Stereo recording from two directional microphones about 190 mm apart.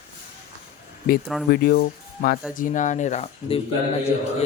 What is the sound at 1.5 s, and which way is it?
Speech, 55° left (ahead or behind).